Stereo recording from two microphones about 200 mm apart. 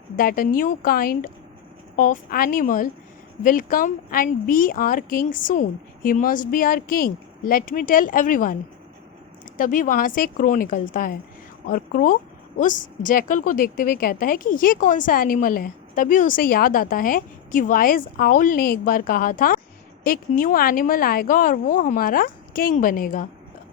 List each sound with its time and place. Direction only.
0.2 s a woman's voice: 45° left (ahead or behind)
9.6 s a woman's voice: 45° left (ahead or behind)